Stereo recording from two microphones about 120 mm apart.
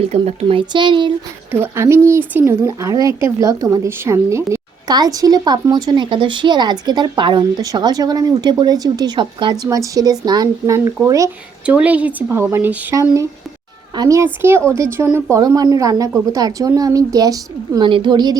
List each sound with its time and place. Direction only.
0.0 s speech: 60° right (ahead or behind); by 1.1 s 40° right (ahead or behind)
1.5 s speech: 20° right (ahead or behind); by 9.6 s 40° right (ahead or behind)
9.6 s speech: 30° right (ahead or behind)
11.6 s speech: 10° right (ahead or behind); by 17.8 s 30° right (ahead or behind)
17.8 s speech: 45° right (ahead or behind)